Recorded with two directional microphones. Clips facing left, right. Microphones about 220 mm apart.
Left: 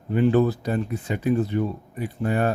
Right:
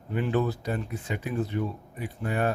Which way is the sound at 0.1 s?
35° left (ahead or behind).